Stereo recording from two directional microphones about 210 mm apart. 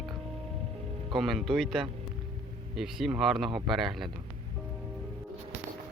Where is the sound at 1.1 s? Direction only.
Centre (ahead or behind).